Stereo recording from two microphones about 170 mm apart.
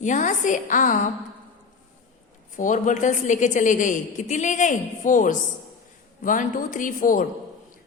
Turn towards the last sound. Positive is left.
turn(degrees=50)  # may be behind; listen again after turning